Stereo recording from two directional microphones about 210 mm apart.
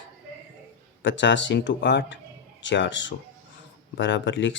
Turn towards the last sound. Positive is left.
turn(degrees=60)  # may be behind; listen again after turning